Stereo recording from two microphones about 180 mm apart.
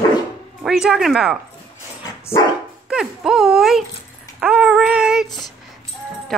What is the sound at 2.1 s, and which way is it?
Dog, 20° left (ahead or behind).